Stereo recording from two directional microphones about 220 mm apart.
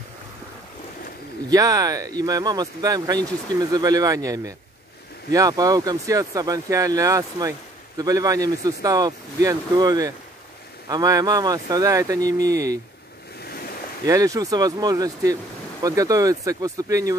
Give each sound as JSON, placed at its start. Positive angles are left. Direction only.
{"t": 1.5, "sound": "speech", "side_deg": -15}
{"t": 14.0, "sound": "speech", "side_deg": -15}